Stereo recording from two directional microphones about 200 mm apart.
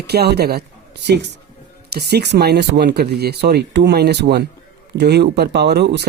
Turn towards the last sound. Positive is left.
turn(degrees=-55)  # may be behind; listen again after turning